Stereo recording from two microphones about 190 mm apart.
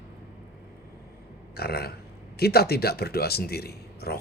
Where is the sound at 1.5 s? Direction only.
55° left (ahead or behind).